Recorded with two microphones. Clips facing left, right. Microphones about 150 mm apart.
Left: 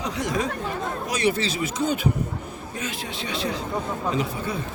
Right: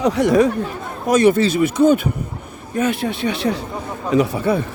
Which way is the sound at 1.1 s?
50° right (ahead or behind).